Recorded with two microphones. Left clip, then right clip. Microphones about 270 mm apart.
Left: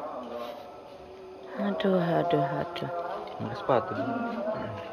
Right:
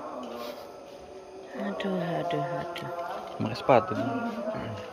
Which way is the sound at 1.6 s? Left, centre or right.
Centre.